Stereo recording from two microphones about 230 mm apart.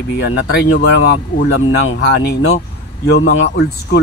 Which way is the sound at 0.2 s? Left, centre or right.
Left.